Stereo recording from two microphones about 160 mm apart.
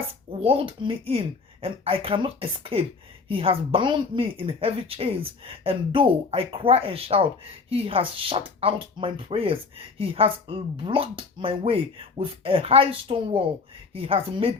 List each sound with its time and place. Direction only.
0.3 s speech: 35° right (ahead or behind)